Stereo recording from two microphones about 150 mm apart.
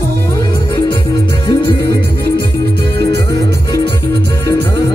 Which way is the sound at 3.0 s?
90° right.